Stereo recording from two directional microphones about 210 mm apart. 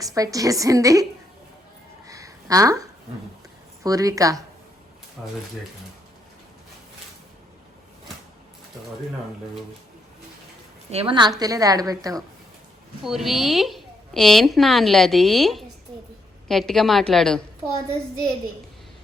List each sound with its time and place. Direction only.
0.0 s a woman's voice: 15° right (ahead or behind)
2.0 s a sound: 15° right (ahead or behind)
3.8 s a woman's voice: 15° right (ahead or behind)
5.2 s a woman's voice: 5° right (ahead or behind)
10.9 s a woman's voice: 25° right (ahead or behind)
13.1 s a woman's voice: centre (ahead or behind)